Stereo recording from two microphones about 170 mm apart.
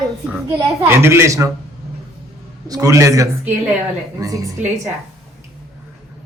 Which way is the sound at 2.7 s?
20° right (ahead or behind).